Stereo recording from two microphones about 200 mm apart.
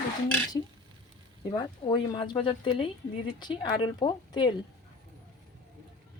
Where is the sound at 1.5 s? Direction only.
20° left (ahead or behind).